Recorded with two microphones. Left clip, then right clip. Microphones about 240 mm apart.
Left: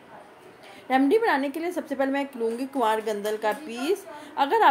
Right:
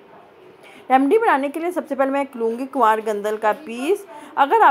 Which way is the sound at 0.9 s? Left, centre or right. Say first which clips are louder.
Right 6 dB; centre.